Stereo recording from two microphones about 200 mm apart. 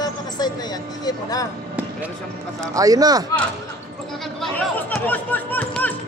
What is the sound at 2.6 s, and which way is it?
Speech, 15° right (ahead or behind).